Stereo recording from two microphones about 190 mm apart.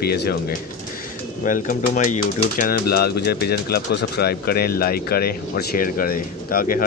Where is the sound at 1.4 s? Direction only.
45° left (ahead or behind).